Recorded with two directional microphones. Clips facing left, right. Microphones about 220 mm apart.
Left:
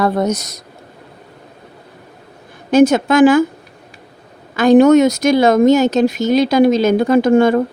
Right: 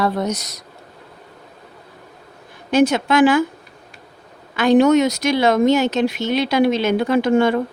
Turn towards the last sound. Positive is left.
turn(degrees=45)  # may be behind; listen again after turning